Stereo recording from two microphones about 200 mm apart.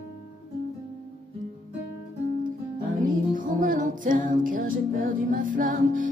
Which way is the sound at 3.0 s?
40° right (ahead or behind).